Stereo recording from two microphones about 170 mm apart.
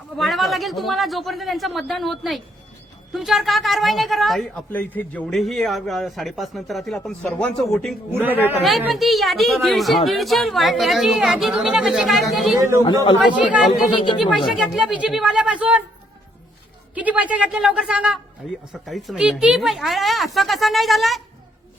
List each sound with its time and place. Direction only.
0.2 s a woman's voice: centre (ahead or behind)
12.5 s a woman's voice: 15° right (ahead or behind)
12.8 s a man's voice: 25° left (ahead or behind)
14.2 s a woman's voice: 5° right (ahead or behind)
16.9 s a woman's voice: 10° right (ahead or behind)